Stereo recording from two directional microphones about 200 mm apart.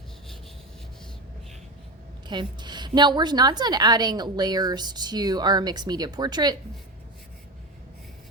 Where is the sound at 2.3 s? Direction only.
20° right (ahead or behind).